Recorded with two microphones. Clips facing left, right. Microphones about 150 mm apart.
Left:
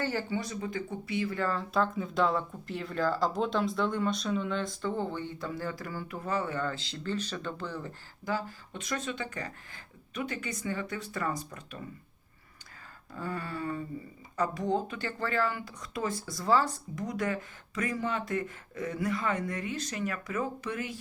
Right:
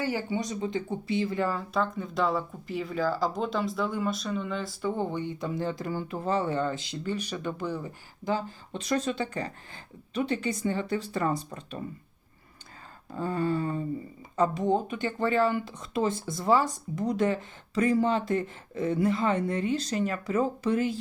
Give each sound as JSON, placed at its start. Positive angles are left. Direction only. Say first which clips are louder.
{"t": 0.0, "sound": "speech", "louder": "right 2 dB", "side_deg": -15}
{"t": 1.5, "sound": "speech", "louder": "even", "side_deg": 0}
{"t": 8.2, "sound": "speech", "louder": "right 4 dB", "side_deg": -25}
{"t": 13.1, "sound": "speech", "louder": "right 9 dB", "side_deg": -25}
{"t": 16.9, "sound": "speech", "louder": "right 9 dB", "side_deg": -30}